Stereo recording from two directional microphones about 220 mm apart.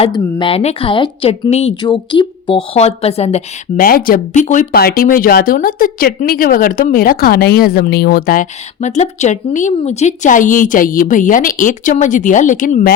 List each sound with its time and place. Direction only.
0.0 s a woman's voice: 20° left (ahead or behind); by 12.9 s 40° left (ahead or behind)